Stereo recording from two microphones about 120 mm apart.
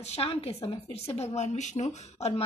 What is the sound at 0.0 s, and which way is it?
Speech, 55° left (ahead or behind).